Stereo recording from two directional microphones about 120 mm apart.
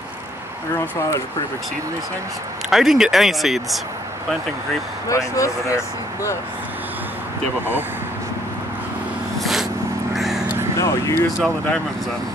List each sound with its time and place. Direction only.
2.7 s speech: centre (ahead or behind)
5.1 s speech: 25° left (ahead or behind)
9.4 s vehicle: centre (ahead or behind)
10.8 s speech: 25° left (ahead or behind)
11.2 s speech: centre (ahead or behind)